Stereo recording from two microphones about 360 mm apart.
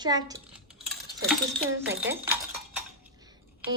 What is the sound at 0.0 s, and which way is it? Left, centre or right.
Dishes, centre.